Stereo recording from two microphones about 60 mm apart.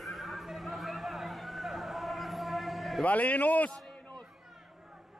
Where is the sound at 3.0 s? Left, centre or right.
Left.